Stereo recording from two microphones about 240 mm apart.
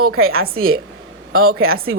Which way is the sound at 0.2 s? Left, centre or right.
Right.